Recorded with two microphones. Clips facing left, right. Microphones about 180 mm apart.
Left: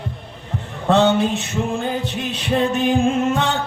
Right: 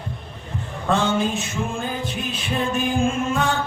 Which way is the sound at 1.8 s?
65° left (ahead or behind).